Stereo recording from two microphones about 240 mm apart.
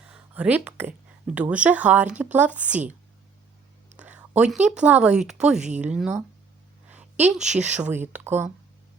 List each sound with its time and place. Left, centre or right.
0.1 s speech: centre
3.9 s a woman's voice: centre
5.5 s speech: right
5.8 s speech: centre
7.3 s speech: centre